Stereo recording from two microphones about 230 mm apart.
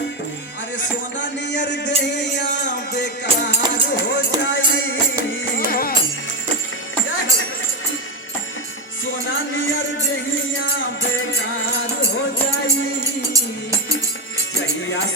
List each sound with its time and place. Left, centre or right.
0.8 s speech: left
2.0 s music: left
3.2 s music: right
4.0 s a sound: left
4.4 s music: left
5.5 s music: left
10.6 s music: left